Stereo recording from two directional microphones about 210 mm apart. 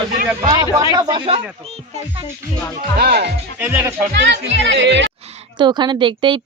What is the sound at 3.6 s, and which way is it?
Speech, 10° right (ahead or behind).